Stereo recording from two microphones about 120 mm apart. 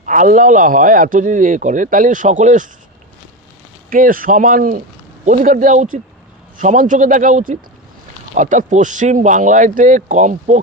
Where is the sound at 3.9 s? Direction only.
90° right.